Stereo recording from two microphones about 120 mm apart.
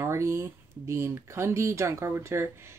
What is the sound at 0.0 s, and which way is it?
Speech, 25° right (ahead or behind).